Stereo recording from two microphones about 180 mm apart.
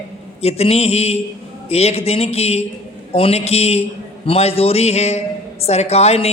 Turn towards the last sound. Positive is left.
turn(degrees=35)  # may be behind; listen again after turning